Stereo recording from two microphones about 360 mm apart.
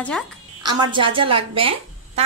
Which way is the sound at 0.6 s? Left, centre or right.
Centre.